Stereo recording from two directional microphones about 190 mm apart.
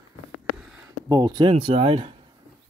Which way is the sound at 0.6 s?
10° right (ahead or behind).